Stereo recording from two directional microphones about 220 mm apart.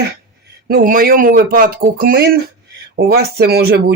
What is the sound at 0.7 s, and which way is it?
Speech, 40° right (ahead or behind).